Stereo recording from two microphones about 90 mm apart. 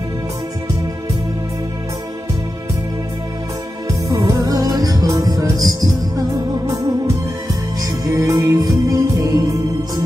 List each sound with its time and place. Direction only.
4.1 s music: 35° right (ahead or behind)
7.8 s music: 40° right (ahead or behind)